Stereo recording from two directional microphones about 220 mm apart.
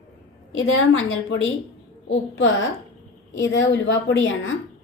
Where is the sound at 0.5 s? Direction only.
60° left (ahead or behind).